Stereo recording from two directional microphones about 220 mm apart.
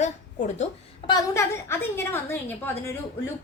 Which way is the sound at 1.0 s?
15° left (ahead or behind).